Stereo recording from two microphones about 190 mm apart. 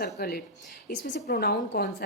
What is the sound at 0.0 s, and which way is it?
A woman's voice, 55° left (ahead or behind).